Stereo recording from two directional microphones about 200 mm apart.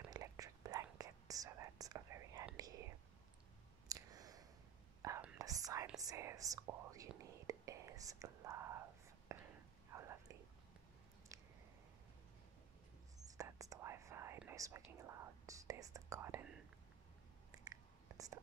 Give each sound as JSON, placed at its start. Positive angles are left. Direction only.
{"t": 0.1, "sound": "whispering", "side_deg": -20}
{"t": 3.9, "sound": "a sound", "side_deg": -20}
{"t": 5.0, "sound": "whispering", "side_deg": -15}
{"t": 13.4, "sound": "whispering", "side_deg": -15}